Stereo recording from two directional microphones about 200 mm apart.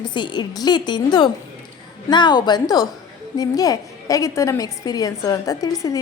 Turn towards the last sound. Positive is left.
turn(degrees=15)  # may be behind; listen again after turning